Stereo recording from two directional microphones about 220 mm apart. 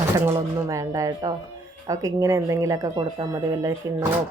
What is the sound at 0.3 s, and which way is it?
Speech, 15° right (ahead or behind).